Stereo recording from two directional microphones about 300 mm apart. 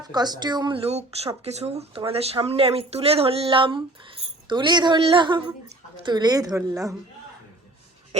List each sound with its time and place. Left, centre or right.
0.0 s speech: centre